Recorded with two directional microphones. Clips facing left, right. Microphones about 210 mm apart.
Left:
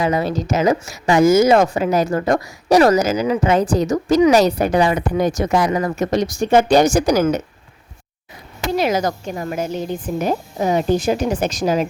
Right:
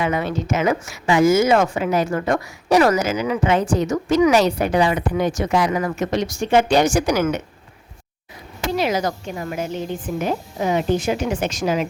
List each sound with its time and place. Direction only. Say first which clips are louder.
0.0 s a woman's voice: left 3 dB; 35° left (ahead or behind)
8.7 s a woman's voice: left 3 dB; 45° left (ahead or behind)